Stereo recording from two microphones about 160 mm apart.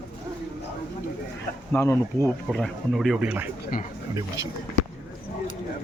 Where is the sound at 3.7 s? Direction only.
60° left (ahead or behind).